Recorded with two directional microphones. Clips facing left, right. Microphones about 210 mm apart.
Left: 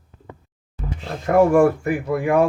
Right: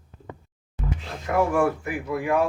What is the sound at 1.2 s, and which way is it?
Speech, 45° left (ahead or behind).